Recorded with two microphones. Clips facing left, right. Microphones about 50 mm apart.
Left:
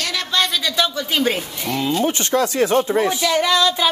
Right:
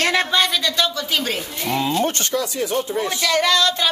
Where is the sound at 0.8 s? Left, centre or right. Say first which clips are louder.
Left 2 dB; centre.